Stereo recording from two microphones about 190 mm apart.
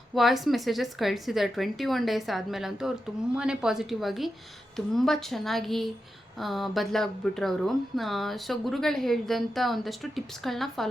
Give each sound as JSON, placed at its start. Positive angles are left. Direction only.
{"t": 0.1, "sound": "speech", "side_deg": 0}